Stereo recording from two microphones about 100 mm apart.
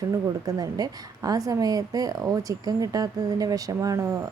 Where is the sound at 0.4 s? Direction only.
40° right (ahead or behind).